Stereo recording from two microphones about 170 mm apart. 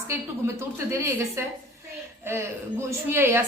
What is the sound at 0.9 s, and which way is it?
A woman's voice, 15° right (ahead or behind).